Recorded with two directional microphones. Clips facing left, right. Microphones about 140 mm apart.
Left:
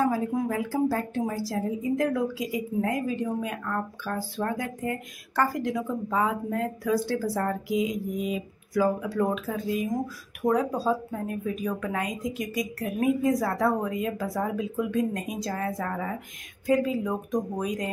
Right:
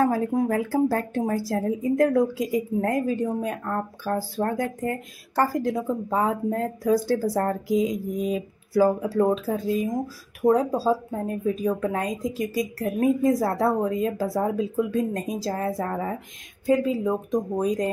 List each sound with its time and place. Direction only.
0.0 s speech: 50° right (ahead or behind); by 17.6 s 25° right (ahead or behind)
17.6 s speech: 35° right (ahead or behind)